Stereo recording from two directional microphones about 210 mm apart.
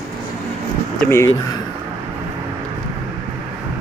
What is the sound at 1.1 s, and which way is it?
Speech, 15° left (ahead or behind).